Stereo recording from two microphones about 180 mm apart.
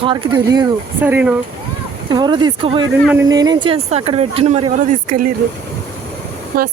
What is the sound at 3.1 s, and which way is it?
Speech, 15° right (ahead or behind).